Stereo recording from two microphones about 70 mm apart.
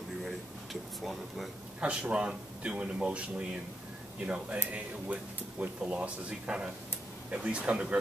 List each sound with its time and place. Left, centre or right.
1.8 s speech: centre